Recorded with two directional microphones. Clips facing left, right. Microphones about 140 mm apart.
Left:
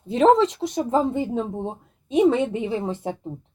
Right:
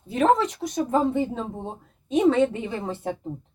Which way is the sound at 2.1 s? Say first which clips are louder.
Left 1 dB; 10° left (ahead or behind).